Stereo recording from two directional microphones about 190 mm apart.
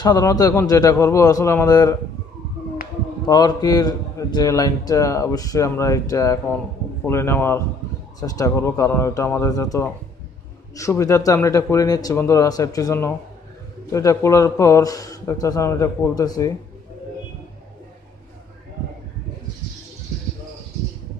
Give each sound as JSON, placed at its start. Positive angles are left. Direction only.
{"t": 0.0, "sound": "a man's voice", "side_deg": 20}
{"t": 3.3, "sound": "a man's voice", "side_deg": 20}